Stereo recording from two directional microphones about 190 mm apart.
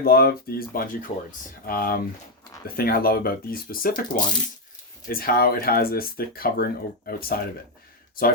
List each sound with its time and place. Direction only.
0.0 s speech: 55° left (ahead or behind)